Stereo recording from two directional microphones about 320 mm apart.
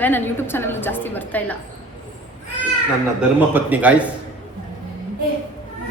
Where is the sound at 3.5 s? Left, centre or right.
Centre.